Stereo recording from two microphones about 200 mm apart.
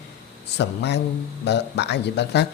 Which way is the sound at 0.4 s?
60° left (ahead or behind).